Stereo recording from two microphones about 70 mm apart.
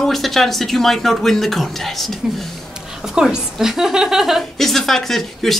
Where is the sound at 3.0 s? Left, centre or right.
Centre.